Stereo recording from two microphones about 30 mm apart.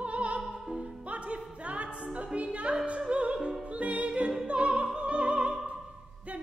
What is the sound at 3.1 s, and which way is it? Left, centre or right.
Opera, right.